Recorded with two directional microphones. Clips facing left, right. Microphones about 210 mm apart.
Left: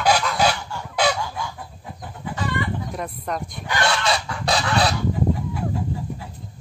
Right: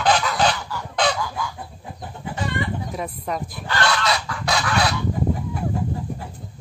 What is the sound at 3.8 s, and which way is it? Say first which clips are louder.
Goose: left 1 dB; 25° left (ahead or behind).